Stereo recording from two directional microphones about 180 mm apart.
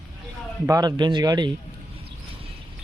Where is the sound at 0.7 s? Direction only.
20° right (ahead or behind).